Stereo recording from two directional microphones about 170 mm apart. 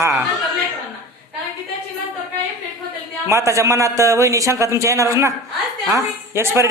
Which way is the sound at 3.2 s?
15° right (ahead or behind).